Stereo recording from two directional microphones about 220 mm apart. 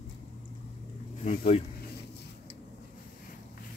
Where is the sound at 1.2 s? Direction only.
30° left (ahead or behind).